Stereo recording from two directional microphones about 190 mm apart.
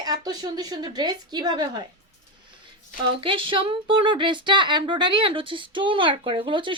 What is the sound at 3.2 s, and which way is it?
Speech, 25° right (ahead or behind).